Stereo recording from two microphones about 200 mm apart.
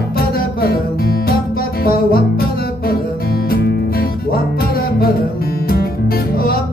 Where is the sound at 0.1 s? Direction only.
50° left (ahead or behind).